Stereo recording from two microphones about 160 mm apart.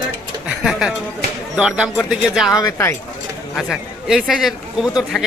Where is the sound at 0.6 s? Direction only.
5° right (ahead or behind).